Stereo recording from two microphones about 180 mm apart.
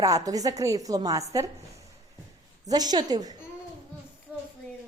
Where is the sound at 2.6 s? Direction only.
20° right (ahead or behind).